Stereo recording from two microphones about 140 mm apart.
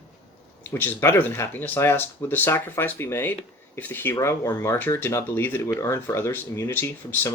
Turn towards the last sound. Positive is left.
turn(degrees=15)  # may be behind; listen again after turning